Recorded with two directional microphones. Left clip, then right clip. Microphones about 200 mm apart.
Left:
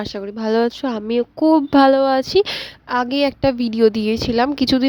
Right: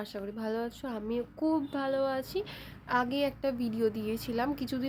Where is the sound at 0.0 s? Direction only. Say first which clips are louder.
Left 13 dB; 45° left (ahead or behind).